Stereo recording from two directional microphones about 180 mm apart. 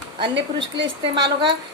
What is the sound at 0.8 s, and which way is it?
Speech, 25° right (ahead or behind).